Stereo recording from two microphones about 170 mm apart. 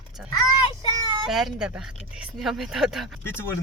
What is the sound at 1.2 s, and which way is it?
Speech, centre (ahead or behind).